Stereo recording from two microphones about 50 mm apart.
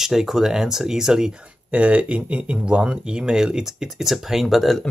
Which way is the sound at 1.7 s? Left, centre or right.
Right.